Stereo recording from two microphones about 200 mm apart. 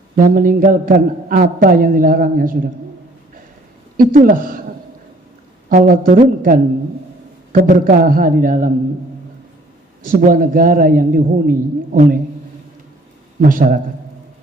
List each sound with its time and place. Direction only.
0.2 s a man's voice: 45° right (ahead or behind)
4.1 s a man's voice: 45° right (ahead or behind)
5.6 s a man's voice: 45° right (ahead or behind)
10.1 s a man's voice: 45° right (ahead or behind)
13.4 s a man's voice: 45° right (ahead or behind)